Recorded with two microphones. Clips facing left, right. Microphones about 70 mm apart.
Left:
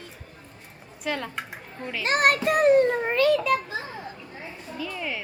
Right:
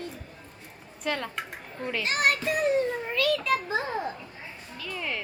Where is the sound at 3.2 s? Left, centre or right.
Left.